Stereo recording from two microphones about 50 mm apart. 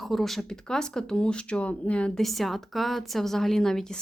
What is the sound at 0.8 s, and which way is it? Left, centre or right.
Speech, centre.